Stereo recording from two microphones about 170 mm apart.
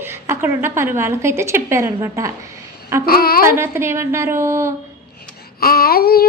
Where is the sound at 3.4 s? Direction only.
15° right (ahead or behind).